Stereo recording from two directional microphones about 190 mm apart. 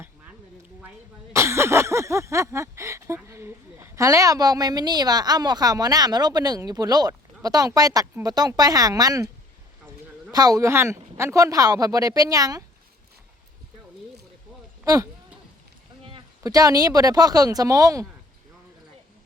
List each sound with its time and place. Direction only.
0.8 s speech: 10° right (ahead or behind)
10.3 s speech: 20° right (ahead or behind)
16.0 s speech: 25° right (ahead or behind)